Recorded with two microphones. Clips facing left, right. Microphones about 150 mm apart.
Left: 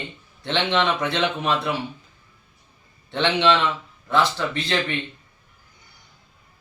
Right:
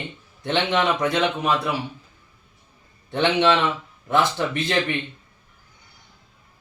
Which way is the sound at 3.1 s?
15° right (ahead or behind).